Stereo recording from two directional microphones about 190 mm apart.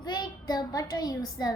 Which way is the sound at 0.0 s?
20° left (ahead or behind).